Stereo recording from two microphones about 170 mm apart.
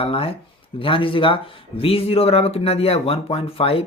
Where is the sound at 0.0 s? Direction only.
35° left (ahead or behind).